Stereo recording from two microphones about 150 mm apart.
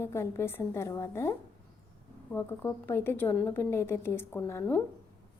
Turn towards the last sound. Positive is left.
turn(degrees=15)  # may be behind; listen again after turning